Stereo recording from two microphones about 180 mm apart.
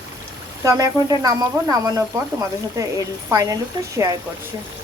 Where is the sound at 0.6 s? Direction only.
20° right (ahead or behind).